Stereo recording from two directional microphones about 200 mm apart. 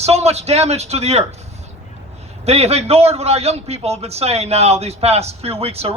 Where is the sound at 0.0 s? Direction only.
30° right (ahead or behind).